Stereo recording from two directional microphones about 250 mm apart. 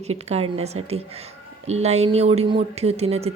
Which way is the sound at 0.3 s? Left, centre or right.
Right.